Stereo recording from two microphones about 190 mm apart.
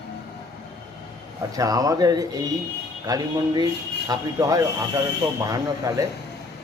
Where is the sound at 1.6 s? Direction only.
20° right (ahead or behind).